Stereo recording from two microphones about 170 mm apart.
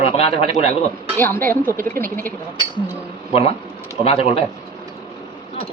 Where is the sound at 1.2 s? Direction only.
15° left (ahead or behind).